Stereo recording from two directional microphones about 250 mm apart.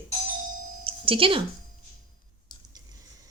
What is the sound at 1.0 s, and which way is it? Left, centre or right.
Speech, right.